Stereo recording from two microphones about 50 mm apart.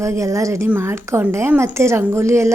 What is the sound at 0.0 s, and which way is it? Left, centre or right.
Speech, right.